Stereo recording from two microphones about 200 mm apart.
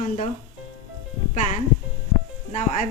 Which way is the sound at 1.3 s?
35° left (ahead or behind).